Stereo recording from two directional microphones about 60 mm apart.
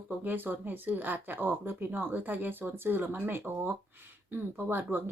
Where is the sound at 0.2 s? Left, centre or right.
Right.